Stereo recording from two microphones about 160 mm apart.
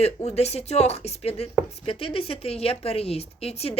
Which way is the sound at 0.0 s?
40° left (ahead or behind).